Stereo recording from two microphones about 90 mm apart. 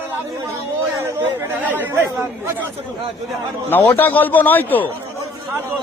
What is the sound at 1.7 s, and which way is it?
Speech, 20° right (ahead or behind).